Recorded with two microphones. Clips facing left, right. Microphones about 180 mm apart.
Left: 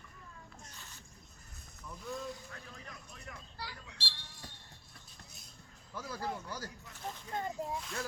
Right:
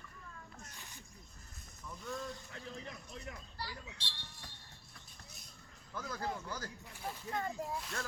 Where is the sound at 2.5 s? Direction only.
25° right (ahead or behind).